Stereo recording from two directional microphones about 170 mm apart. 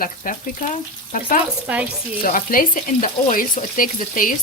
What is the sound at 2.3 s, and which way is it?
Speech, 55° left (ahead or behind).